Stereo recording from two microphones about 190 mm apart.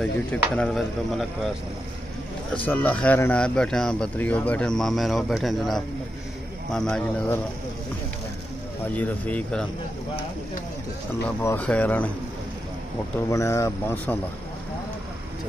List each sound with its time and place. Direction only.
0.0 s speech: 5° left (ahead or behind)
2.5 s speech: 10° left (ahead or behind)
8.9 s speech: 10° left (ahead or behind)
11.2 s speech: 10° left (ahead or behind)
13.3 s speech: 15° left (ahead or behind)